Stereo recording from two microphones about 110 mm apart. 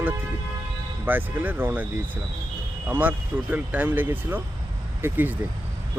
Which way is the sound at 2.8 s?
15° right (ahead or behind).